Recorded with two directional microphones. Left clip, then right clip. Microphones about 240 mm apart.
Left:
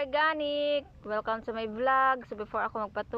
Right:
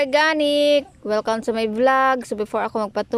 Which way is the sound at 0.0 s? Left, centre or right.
Centre.